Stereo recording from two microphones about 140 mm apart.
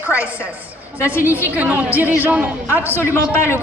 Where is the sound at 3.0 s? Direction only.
20° left (ahead or behind).